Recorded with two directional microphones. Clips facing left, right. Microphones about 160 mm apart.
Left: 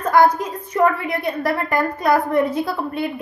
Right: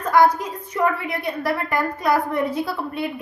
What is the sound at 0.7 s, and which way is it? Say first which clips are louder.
A woman's voice: left 4 dB; 45° left (ahead or behind).